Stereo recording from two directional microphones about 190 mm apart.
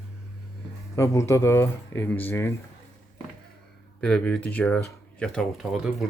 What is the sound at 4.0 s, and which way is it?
Speech, 5° left (ahead or behind).